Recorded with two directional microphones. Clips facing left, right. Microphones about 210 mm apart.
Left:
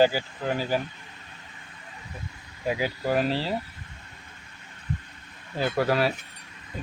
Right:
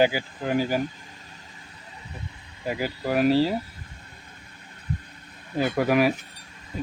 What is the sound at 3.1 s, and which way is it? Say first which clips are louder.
Speech: right 6 dB; 10° right (ahead or behind).